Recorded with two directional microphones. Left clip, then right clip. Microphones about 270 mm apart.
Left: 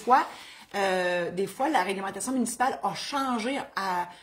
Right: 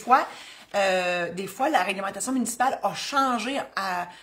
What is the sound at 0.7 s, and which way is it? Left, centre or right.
A woman's voice, centre.